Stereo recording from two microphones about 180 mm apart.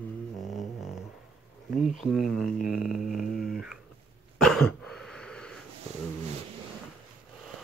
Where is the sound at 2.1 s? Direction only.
Centre (ahead or behind).